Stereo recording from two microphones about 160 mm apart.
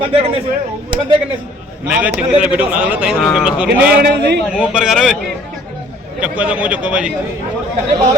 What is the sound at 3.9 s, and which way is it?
Speech, 75° right (ahead or behind).